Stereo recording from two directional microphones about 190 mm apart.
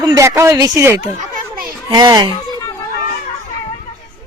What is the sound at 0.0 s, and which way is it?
Speech, 15° right (ahead or behind).